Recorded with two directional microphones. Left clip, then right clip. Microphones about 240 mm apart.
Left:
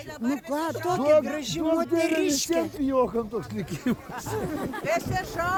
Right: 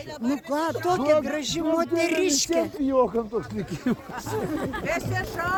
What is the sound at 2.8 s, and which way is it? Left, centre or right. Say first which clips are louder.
Speech: right 2 dB; left.